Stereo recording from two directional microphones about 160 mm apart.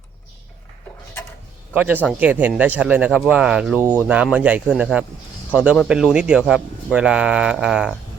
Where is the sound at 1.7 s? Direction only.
10° right (ahead or behind).